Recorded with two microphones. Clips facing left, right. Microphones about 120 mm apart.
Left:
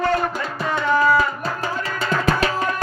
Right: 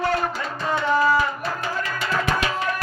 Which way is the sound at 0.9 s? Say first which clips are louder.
Left 2 dB; 15° right (ahead or behind).